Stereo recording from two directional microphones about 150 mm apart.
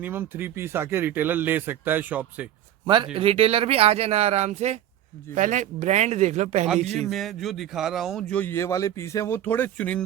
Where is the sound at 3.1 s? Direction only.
40° right (ahead or behind).